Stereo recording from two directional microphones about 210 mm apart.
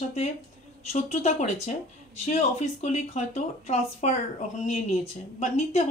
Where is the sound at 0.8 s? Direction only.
30° left (ahead or behind).